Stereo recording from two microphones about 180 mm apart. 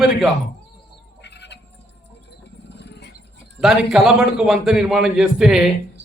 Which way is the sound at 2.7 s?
70° left (ahead or behind).